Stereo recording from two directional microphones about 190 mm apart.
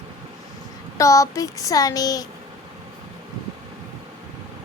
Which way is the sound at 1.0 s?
15° left (ahead or behind).